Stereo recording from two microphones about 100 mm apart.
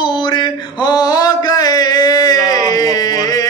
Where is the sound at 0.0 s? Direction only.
50° left (ahead or behind).